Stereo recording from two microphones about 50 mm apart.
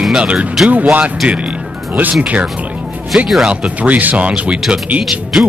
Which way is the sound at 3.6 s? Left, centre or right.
Right.